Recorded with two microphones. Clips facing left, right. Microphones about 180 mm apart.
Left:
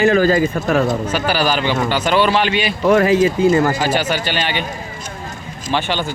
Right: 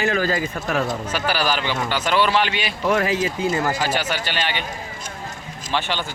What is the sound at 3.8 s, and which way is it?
Speech, 5° right (ahead or behind).